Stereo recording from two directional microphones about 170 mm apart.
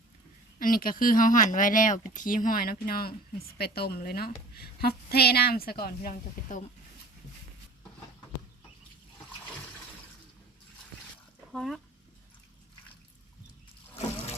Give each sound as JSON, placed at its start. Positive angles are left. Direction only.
{"t": 0.6, "sound": "speech", "side_deg": 55}
{"t": 11.5, "sound": "speech", "side_deg": 0}